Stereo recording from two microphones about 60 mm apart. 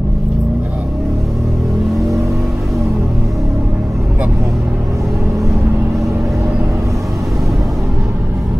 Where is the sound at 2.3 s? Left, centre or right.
Centre.